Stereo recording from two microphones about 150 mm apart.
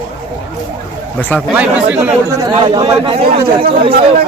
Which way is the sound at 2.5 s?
35° right (ahead or behind).